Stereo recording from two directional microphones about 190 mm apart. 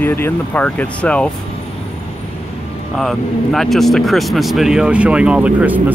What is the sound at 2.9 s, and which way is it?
Speech, centre (ahead or behind).